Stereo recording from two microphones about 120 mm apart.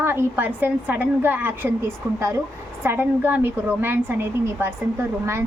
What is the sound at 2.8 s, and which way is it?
A woman's voice, 15° right (ahead or behind).